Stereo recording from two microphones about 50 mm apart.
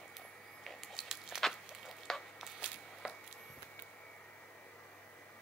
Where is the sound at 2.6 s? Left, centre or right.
Right.